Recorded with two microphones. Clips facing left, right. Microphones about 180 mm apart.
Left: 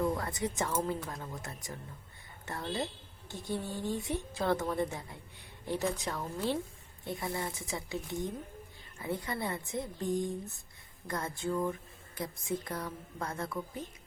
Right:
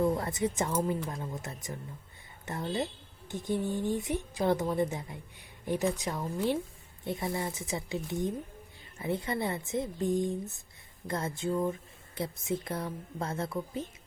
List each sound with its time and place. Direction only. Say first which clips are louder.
0.0 s speech: right 4 dB; 25° right (ahead or behind)